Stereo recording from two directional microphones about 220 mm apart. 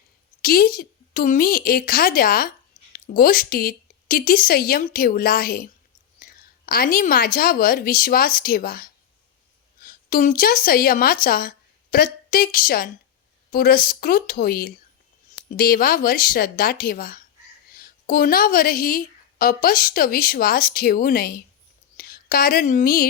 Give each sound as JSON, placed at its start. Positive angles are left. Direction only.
{"t": 0.4, "sound": "a woman's voice", "side_deg": 40}
{"t": 6.1, "sound": "a sound", "side_deg": 40}
{"t": 7.3, "sound": "a woman's voice", "side_deg": 40}